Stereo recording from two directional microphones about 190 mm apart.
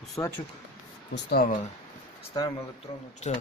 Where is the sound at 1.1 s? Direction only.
55° left (ahead or behind).